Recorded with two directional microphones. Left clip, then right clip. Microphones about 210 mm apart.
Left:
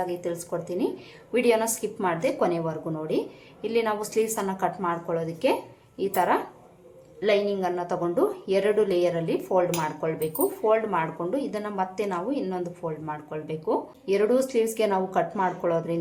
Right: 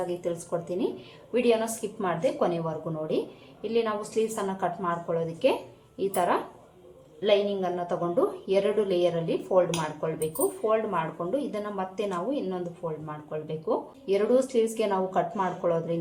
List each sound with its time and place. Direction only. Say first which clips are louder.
0.1 s speech: even; 5° left (ahead or behind)
1.3 s a woman's voice: left 2 dB; 20° left (ahead or behind)